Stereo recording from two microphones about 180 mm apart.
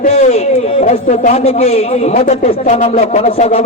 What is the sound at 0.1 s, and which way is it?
A man's voice, 40° left (ahead or behind).